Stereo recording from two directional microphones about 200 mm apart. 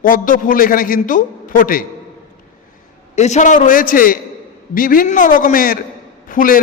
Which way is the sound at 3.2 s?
35° left (ahead or behind).